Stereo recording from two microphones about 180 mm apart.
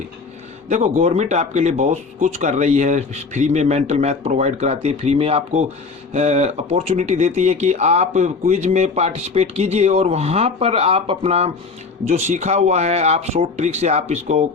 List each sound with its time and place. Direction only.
0.7 s speech: 40° right (ahead or behind)